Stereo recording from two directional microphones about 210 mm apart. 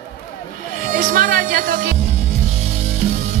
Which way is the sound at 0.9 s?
40° right (ahead or behind).